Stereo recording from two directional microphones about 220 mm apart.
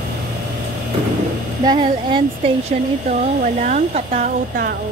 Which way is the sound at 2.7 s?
35° right (ahead or behind).